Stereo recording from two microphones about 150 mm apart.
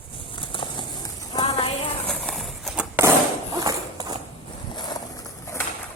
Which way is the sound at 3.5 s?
25° right (ahead or behind).